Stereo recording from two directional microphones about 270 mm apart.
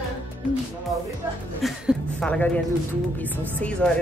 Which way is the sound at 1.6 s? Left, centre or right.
Centre.